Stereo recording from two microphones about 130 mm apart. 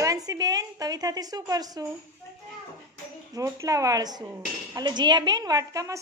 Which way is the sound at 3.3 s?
25° right (ahead or behind).